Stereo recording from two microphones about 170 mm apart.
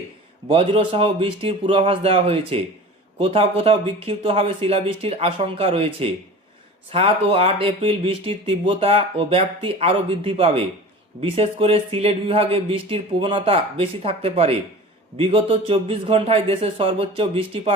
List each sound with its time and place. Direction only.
0.4 s speech: 35° right (ahead or behind)